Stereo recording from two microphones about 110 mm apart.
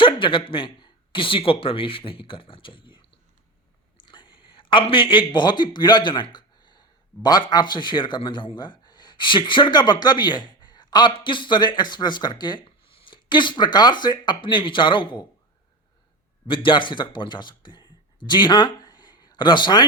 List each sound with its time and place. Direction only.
0.0 s a man's voice: 50° left (ahead or behind)
16.5 s a man's voice: 50° left (ahead or behind)